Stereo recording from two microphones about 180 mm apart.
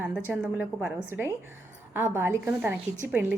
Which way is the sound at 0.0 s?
5° right (ahead or behind).